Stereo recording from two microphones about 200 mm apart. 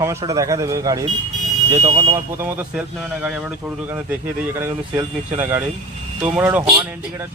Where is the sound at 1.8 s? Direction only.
35° right (ahead or behind).